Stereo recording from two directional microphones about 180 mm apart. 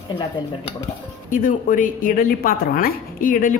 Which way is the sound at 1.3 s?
50° left (ahead or behind).